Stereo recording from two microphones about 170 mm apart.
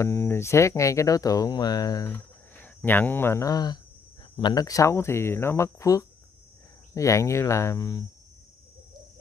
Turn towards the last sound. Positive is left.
turn(degrees=20)  # may be behind; listen again after turning